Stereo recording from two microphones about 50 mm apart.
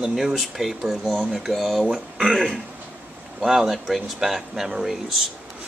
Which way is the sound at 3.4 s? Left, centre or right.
Centre.